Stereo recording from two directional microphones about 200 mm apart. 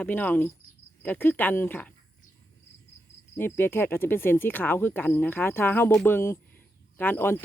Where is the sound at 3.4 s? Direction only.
10° left (ahead or behind).